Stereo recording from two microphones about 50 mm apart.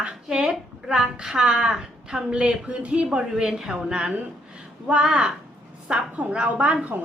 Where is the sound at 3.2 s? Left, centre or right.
Centre.